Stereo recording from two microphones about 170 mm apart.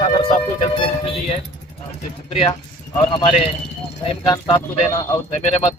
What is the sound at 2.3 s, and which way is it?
Speech, 35° left (ahead or behind).